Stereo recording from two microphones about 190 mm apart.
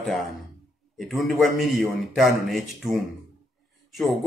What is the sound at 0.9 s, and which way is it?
Speech, centre (ahead or behind).